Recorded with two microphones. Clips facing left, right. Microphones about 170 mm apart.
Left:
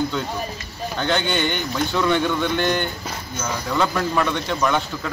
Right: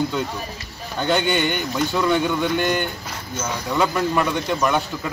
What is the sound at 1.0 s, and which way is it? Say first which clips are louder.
A man's voice: right 2 dB; 5° right (ahead or behind).